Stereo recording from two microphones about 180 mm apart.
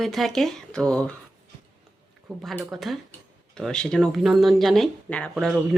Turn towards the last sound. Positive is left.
turn(degrees=-5)  # may be behind; listen again after turning